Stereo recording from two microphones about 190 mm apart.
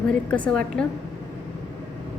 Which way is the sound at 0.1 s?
5° left (ahead or behind).